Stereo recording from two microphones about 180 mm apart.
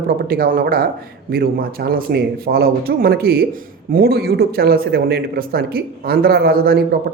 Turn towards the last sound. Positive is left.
turn(degrees=-55)  # may be behind; listen again after turning